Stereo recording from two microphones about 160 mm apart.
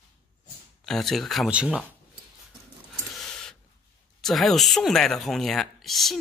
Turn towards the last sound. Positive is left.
turn(degrees=0)  # may be behind; listen again after turning